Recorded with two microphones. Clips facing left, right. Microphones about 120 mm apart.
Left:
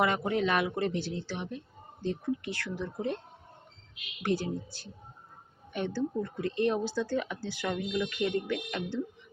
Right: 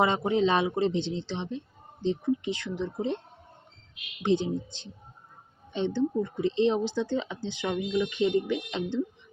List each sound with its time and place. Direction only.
0.0 s speech: 25° right (ahead or behind)
4.2 s speech: 20° right (ahead or behind)